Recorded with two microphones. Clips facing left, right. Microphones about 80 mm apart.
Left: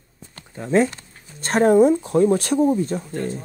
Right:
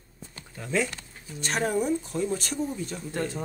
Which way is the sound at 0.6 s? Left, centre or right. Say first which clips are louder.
Left 9 dB; left.